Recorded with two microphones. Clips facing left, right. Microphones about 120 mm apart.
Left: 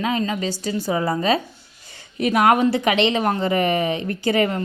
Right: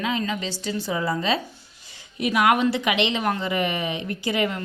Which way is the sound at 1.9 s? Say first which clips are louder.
Left 4 dB; 50° left (ahead or behind).